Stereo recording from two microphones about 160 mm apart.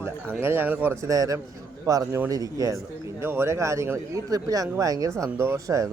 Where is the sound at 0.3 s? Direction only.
15° right (ahead or behind).